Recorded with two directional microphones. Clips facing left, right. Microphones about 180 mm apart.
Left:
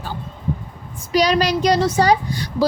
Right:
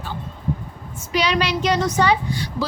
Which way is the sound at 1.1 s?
40° left (ahead or behind).